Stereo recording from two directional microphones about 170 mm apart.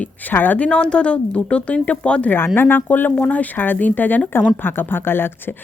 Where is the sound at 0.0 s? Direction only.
10° left (ahead or behind).